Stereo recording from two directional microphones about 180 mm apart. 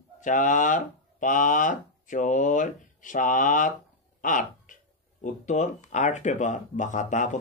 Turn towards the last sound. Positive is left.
turn(degrees=45)  # may be behind; listen again after turning